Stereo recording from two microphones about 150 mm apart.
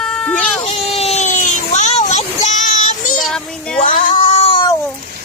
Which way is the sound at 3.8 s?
35° left (ahead or behind).